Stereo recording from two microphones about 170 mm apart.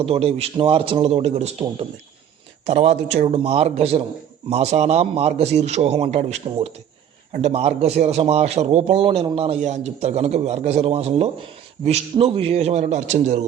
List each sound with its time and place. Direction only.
0.0 s a man's voice: 35° right (ahead or behind)